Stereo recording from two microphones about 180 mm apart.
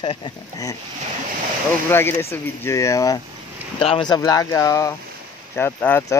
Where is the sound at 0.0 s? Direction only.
25° left (ahead or behind).